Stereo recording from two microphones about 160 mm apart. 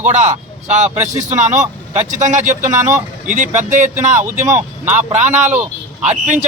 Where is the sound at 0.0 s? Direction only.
50° right (ahead or behind).